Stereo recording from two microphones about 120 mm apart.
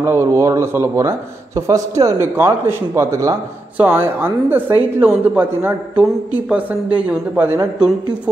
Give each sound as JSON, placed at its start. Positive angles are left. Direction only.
{"t": 0.0, "sound": "speech", "side_deg": -20}